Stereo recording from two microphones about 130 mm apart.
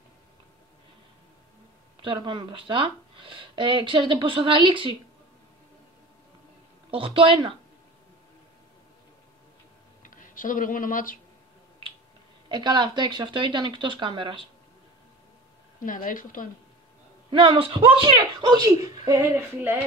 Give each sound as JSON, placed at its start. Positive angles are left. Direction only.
{"t": 2.0, "sound": "speech", "side_deg": -40}
{"t": 6.9, "sound": "speech", "side_deg": -45}
{"t": 10.0, "sound": "speech", "side_deg": 90}
{"t": 12.4, "sound": "speech", "side_deg": -35}
{"t": 15.8, "sound": "a woman's voice", "side_deg": 90}
{"t": 17.3, "sound": "speech", "side_deg": -40}
{"t": 19.3, "sound": "speech", "side_deg": -15}